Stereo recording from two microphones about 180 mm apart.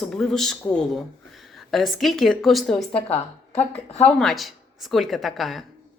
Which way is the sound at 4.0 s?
5° left (ahead or behind).